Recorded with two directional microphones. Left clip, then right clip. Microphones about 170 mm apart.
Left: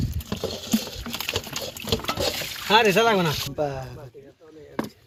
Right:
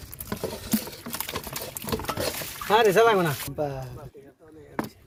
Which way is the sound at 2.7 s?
30° right (ahead or behind).